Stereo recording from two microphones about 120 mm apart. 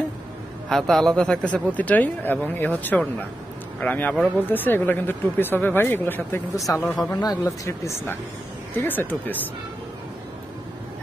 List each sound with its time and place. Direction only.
0.7 s speech: 5° left (ahead or behind); by 6.8 s 25° left (ahead or behind)
6.8 s speech: 10° left (ahead or behind)
7.4 s speech: 25° left (ahead or behind)